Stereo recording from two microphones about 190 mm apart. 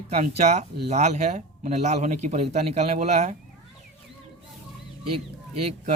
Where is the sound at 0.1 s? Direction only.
35° right (ahead or behind).